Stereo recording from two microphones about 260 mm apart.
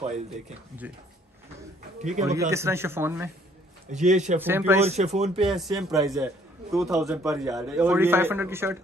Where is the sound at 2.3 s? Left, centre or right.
Centre.